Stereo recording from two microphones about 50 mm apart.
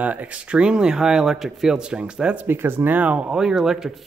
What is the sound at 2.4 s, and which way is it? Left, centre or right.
Speech, right.